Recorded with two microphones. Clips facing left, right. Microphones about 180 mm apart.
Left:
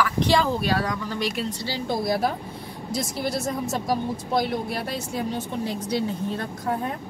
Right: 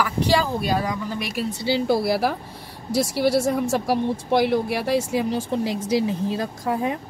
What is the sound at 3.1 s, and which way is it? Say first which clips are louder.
Speech: right 8 dB; 75° right (ahead or behind).